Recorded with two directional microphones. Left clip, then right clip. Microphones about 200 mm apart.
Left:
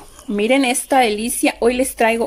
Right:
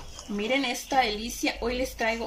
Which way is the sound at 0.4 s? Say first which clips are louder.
Left 11 dB; 55° left (ahead or behind).